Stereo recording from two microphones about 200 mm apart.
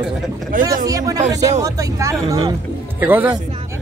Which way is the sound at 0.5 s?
45° right (ahead or behind).